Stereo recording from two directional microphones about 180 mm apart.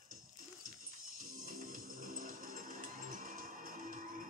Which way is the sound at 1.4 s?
50° right (ahead or behind).